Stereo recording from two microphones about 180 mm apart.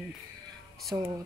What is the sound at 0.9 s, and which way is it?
Speech, 15° right (ahead or behind).